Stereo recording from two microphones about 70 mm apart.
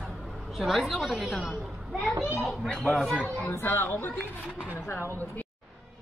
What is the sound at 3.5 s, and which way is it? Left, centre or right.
Speech, left.